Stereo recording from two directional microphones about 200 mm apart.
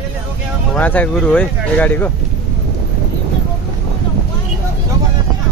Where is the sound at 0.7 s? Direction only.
10° left (ahead or behind).